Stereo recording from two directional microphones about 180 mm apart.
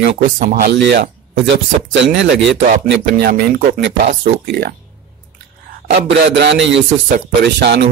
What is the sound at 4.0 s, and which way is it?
Speech, 40° right (ahead or behind).